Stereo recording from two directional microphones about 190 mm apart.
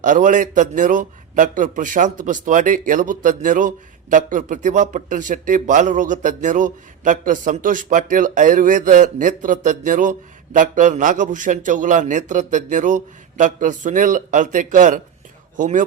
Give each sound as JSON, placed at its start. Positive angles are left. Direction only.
{"t": 0.0, "sound": "speech", "side_deg": -40}